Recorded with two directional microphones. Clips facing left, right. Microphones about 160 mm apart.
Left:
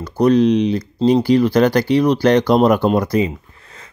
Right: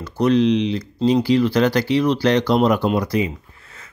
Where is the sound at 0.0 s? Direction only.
45° left (ahead or behind).